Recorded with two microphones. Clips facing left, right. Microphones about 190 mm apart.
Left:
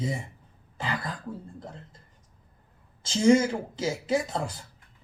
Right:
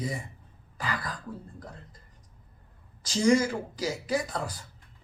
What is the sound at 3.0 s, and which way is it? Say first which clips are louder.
Speech: left 3 dB; 25° left (ahead or behind).